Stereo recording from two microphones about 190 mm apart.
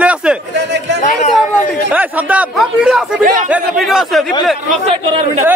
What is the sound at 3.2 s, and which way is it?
Speech, 45° right (ahead or behind).